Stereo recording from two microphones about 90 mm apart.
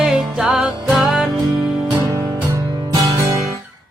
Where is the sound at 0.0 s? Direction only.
5° right (ahead or behind).